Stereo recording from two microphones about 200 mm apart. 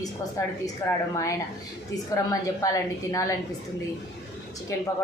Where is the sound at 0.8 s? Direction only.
15° left (ahead or behind).